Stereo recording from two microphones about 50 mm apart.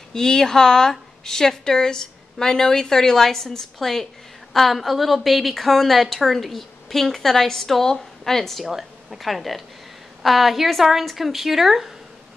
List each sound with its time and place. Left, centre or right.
0.1 s a woman's voice: centre